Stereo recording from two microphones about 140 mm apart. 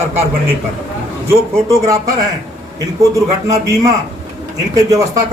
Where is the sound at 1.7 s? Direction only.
25° right (ahead or behind).